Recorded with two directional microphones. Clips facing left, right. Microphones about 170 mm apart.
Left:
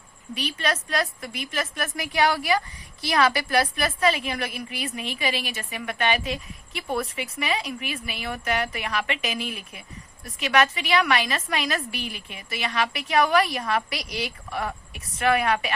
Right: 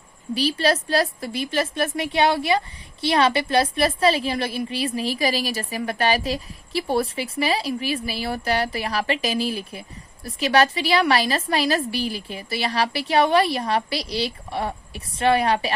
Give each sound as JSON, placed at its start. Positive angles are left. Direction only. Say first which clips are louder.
{"t": 0.3, "sound": "a woman's voice", "louder": "right 7 dB", "side_deg": -35}